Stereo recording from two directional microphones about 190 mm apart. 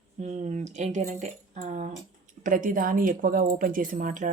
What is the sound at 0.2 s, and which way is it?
Speech, 35° right (ahead or behind).